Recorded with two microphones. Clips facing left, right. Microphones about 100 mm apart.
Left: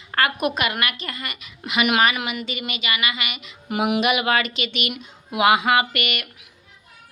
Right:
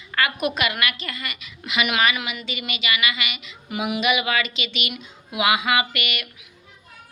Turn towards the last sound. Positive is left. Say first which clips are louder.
# left 3 dB
turn(degrees=50)  # may be behind; listen again after turning